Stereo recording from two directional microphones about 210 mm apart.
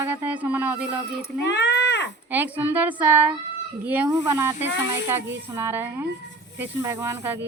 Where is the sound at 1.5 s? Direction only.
55° left (ahead or behind).